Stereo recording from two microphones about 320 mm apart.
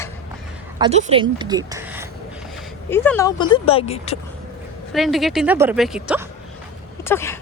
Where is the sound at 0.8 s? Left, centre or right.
Centre.